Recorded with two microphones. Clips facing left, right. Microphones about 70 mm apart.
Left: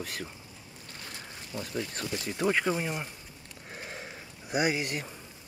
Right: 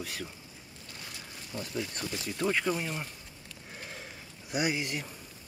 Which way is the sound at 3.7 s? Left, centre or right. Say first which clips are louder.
Left 3 dB; centre.